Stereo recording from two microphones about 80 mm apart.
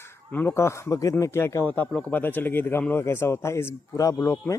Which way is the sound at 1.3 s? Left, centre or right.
Left.